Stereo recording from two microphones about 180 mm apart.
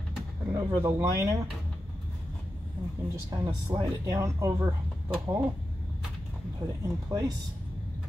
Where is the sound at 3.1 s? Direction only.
15° right (ahead or behind).